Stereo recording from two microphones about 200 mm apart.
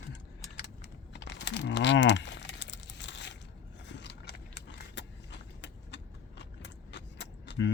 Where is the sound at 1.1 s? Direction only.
60° left (ahead or behind).